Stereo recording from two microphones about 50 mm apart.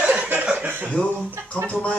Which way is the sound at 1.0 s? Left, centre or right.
Left.